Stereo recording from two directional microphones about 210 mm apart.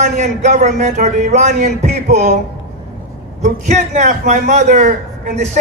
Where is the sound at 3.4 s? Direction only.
35° right (ahead or behind).